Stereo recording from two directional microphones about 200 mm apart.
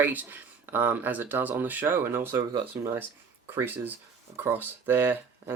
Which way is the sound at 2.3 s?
20° right (ahead or behind).